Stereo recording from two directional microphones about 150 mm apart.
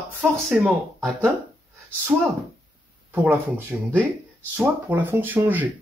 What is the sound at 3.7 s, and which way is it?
Speech, 10° right (ahead or behind).